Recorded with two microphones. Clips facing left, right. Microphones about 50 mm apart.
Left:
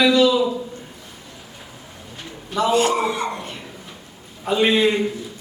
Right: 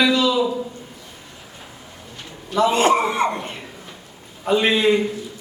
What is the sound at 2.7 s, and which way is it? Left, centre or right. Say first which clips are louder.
Speech: even; right.